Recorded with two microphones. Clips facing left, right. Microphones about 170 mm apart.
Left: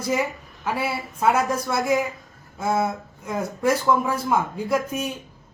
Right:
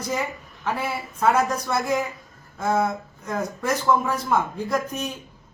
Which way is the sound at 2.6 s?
5° left (ahead or behind).